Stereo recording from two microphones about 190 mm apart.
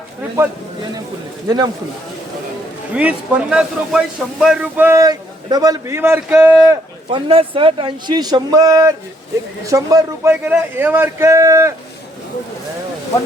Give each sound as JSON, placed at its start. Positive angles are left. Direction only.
{"t": 1.5, "sound": "speech", "side_deg": -20}
{"t": 2.9, "sound": "a man's voice", "side_deg": -5}
{"t": 7.1, "sound": "a man's voice", "side_deg": -30}